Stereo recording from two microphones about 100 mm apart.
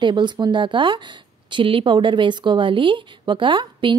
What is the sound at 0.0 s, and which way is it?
Speech, 50° right (ahead or behind).